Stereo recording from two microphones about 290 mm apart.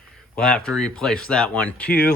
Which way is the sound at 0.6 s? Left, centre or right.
Centre.